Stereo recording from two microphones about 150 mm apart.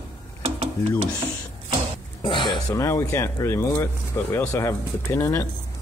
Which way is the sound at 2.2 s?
30° left (ahead or behind).